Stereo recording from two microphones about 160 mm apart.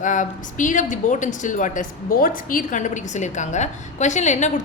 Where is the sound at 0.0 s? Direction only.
50° left (ahead or behind).